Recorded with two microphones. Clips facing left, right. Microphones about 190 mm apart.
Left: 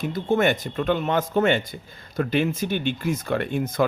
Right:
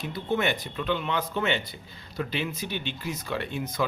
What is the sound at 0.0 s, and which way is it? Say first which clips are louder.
Speech: left 6 dB; 45° left (ahead or behind).